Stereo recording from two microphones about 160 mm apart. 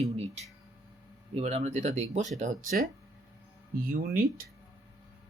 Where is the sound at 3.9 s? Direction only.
65° right (ahead or behind).